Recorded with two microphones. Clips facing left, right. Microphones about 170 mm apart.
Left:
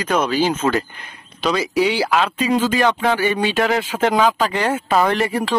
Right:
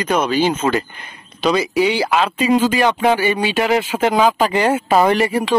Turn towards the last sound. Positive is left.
turn(degrees=-5)  # may be behind; listen again after turning